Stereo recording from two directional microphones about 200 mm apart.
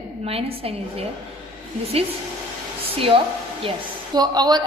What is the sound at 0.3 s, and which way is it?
Speech, 30° right (ahead or behind).